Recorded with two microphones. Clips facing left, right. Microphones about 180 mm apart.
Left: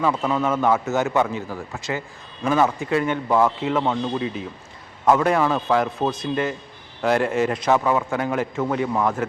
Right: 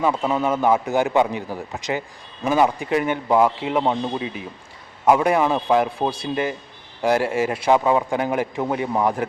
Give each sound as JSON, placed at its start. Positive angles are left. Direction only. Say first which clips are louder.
{"t": 0.0, "sound": "a man's voice", "louder": "right 1 dB", "side_deg": -15}